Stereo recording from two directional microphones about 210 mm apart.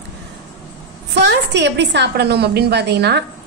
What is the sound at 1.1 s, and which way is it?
A woman's voice, 55° right (ahead or behind).